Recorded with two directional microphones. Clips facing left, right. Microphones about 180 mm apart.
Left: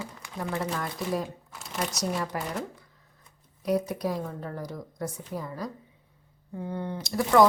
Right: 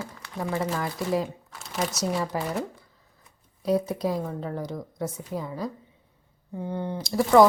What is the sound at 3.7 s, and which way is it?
Speech, 25° right (ahead or behind).